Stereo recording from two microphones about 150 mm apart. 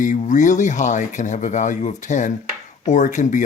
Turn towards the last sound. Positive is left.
turn(degrees=55)  # may be behind; listen again after turning